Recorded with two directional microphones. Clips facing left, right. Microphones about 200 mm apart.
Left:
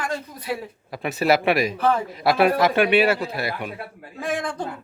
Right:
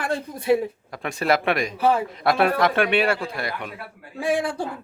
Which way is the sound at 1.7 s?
10° right (ahead or behind).